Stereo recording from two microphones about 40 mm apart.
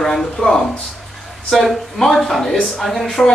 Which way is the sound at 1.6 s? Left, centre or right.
Centre.